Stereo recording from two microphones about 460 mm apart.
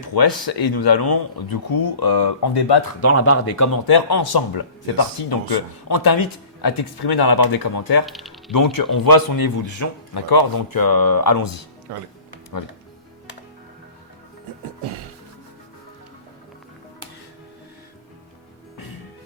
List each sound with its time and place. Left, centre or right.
0.1 s speech: left
3.0 s speech: left
3.8 s speech: left
8.0 s speech: centre
8.5 s speech: left
10.2 s speech: left